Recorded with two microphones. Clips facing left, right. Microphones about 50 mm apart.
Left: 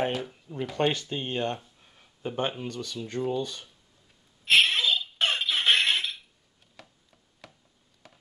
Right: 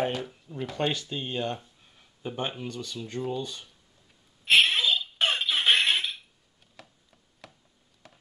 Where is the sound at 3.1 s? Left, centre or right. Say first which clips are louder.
Left 3 dB; left.